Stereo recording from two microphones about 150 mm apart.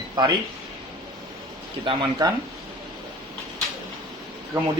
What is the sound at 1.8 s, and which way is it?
Speech, 25° right (ahead or behind).